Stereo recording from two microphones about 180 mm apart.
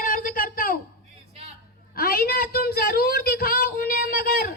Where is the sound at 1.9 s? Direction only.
55° left (ahead or behind).